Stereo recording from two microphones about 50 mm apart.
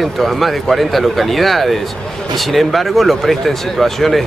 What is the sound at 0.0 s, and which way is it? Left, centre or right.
Speech, centre.